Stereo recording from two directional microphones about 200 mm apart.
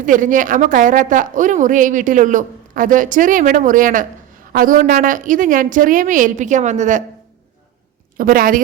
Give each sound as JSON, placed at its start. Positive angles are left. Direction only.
{"t": 0.0, "sound": "a woman's voice", "side_deg": -40}
{"t": 8.2, "sound": "speech", "side_deg": -45}